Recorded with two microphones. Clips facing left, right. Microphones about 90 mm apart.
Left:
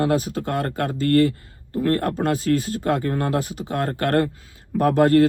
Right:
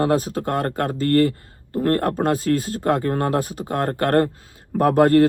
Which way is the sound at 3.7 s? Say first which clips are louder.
Right 2 dB; 25° right (ahead or behind).